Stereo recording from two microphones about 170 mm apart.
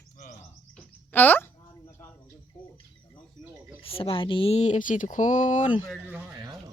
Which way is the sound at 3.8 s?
35° left (ahead or behind).